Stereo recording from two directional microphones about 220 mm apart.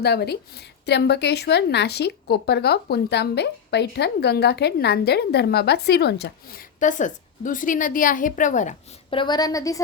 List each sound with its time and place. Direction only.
0.0 s a woman's voice: 45° left (ahead or behind)
6.7 s a woman's voice: 35° left (ahead or behind); by 9.8 s 15° left (ahead or behind)